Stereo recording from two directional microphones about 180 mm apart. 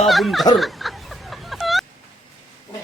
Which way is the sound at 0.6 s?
Centre (ahead or behind).